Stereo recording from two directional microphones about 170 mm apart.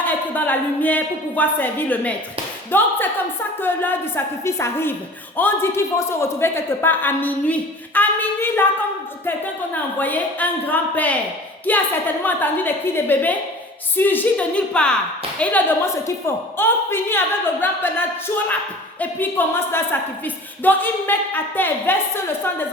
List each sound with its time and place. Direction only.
0.0 s a woman's voice: 10° left (ahead or behind)
9.7 s a woman's voice: 10° left (ahead or behind)